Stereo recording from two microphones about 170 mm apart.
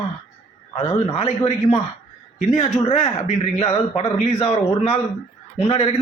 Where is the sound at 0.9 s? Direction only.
35° left (ahead or behind).